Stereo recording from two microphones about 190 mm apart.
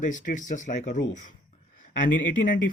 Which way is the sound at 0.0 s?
40° left (ahead or behind).